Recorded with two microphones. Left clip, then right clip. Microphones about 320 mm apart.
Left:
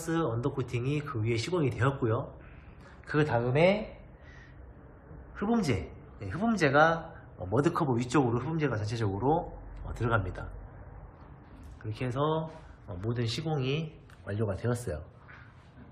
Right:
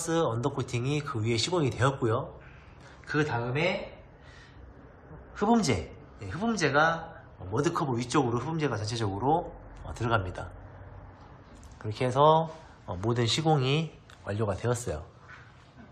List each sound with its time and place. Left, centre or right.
0.0 s speech: centre
5.3 s a man's voice: centre
11.8 s speech: centre